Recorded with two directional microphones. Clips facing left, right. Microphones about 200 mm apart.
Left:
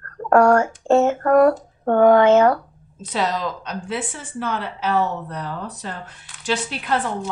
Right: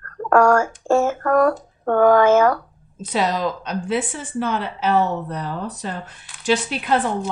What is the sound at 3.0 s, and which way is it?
A woman's voice, 15° right (ahead or behind).